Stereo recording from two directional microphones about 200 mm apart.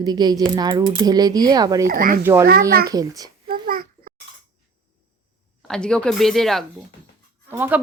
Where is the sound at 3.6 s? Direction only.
45° right (ahead or behind).